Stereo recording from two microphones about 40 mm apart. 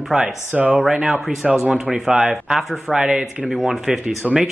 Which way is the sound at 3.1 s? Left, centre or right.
Right.